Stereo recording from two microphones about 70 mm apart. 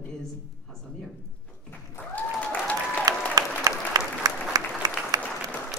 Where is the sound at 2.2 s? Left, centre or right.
Left.